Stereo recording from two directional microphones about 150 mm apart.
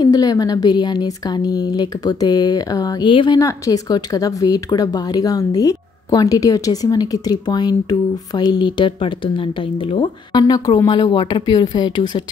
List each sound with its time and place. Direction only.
0.0 s speech: 25° left (ahead or behind)
3.3 s speech: 20° left (ahead or behind)